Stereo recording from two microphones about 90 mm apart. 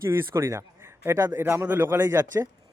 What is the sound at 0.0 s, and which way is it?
A man's voice, 30° right (ahead or behind).